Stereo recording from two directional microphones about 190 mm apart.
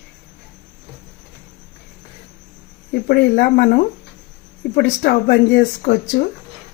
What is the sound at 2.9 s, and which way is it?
A woman's voice, 50° left (ahead or behind).